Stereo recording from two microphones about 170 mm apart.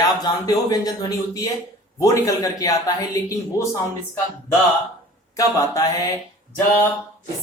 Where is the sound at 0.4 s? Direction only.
20° left (ahead or behind).